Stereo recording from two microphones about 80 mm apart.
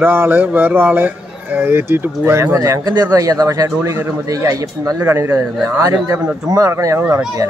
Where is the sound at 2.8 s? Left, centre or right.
Right.